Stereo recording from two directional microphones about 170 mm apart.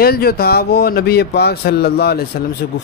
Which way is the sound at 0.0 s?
65° left (ahead or behind).